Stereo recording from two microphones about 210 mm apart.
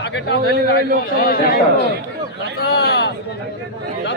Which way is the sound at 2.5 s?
50° left (ahead or behind).